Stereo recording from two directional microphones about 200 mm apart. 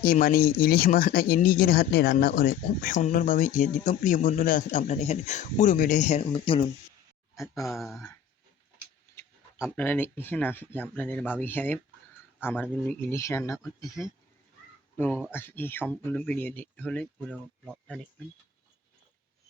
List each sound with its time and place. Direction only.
0.0 s speech: 45° left (ahead or behind); by 6.7 s 25° left (ahead or behind)
7.6 s speech: centre (ahead or behind)
9.6 s speech: 5° left (ahead or behind)
14.9 s speech: 10° left (ahead or behind)